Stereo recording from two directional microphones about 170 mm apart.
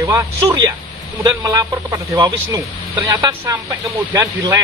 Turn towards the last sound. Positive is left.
turn(degrees=-15)  # may be behind; listen again after turning